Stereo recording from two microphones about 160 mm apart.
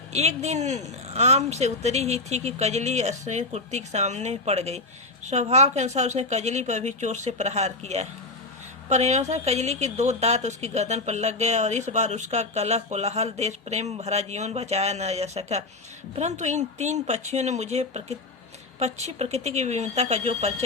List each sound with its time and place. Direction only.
0.1 s a woman's voice: 45° right (ahead or behind)